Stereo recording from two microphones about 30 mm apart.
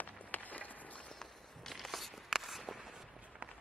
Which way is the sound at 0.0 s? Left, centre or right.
Left.